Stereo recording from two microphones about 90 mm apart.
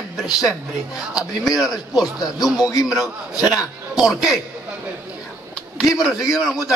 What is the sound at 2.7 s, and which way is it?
Speech, 40° left (ahead or behind).